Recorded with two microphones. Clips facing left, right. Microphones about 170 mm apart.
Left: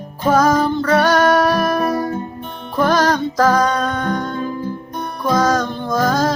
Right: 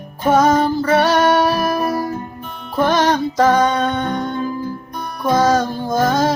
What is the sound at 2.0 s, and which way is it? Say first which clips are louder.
Music: left 1 dB; 30° left (ahead or behind).